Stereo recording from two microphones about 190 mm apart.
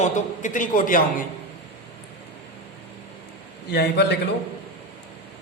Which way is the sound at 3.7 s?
55° left (ahead or behind).